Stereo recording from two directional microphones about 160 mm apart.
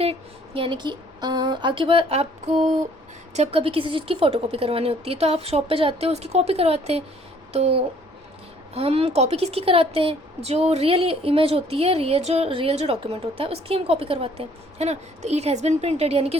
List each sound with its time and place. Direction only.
0.0 s a woman's voice: 35° right (ahead or behind)